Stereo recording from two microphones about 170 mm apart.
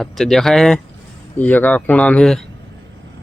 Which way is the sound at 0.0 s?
Centre (ahead or behind).